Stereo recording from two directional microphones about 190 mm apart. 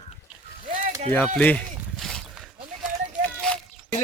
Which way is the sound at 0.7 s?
45° right (ahead or behind).